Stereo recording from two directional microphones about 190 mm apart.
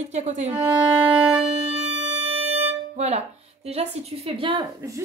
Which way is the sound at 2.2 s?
30° right (ahead or behind).